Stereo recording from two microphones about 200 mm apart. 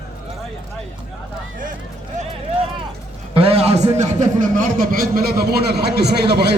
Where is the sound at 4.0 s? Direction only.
40° right (ahead or behind); by 6.5 s 55° right (ahead or behind).